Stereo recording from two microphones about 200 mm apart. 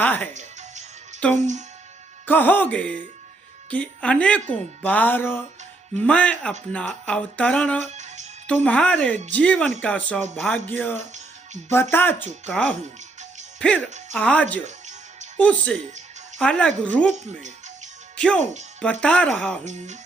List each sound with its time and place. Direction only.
0.0 s music: 10° left (ahead or behind)
1.2 s speech: 5° left (ahead or behind)
7.9 s music: 35° right (ahead or behind)
8.4 s speech: 5° left (ahead or behind)
18.2 s speech: 5° left (ahead or behind)